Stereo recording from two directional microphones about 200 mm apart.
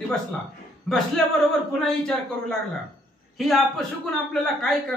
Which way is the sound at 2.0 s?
5° left (ahead or behind).